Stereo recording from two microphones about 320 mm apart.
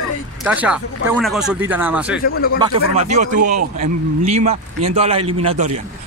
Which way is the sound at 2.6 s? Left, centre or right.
Right.